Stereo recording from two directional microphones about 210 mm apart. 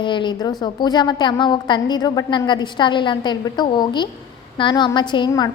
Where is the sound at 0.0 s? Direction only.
20° left (ahead or behind).